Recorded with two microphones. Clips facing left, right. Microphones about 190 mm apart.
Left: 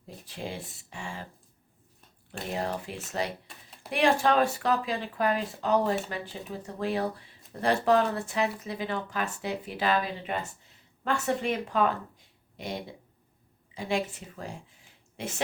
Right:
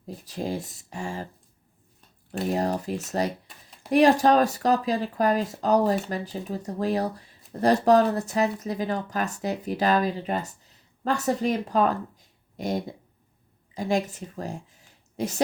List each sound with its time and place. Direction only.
0.3 s speech: 40° right (ahead or behind)
2.5 s speech: 40° right (ahead or behind)